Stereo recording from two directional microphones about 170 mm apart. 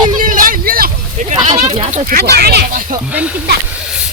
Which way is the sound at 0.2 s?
55° right (ahead or behind).